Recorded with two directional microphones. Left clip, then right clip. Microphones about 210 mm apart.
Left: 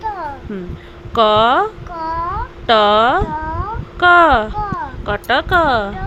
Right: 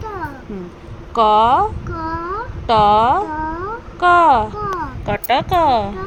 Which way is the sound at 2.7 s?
25° left (ahead or behind).